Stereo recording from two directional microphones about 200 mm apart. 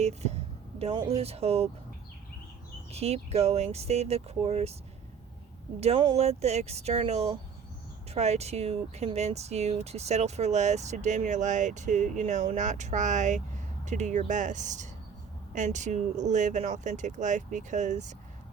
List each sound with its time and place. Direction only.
0.0 s speech: 35° right (ahead or behind)
2.9 s speech: 30° right (ahead or behind)
5.8 s speech: 30° right (ahead or behind)